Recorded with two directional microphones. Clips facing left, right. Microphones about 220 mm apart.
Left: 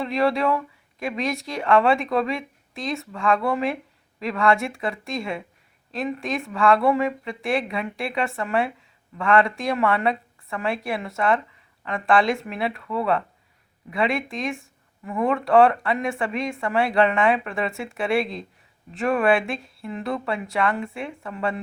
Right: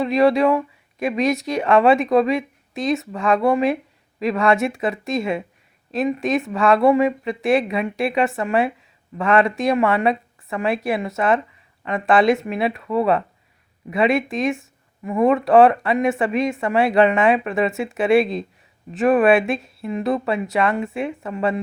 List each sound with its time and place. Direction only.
0.0 s speech: 20° right (ahead or behind)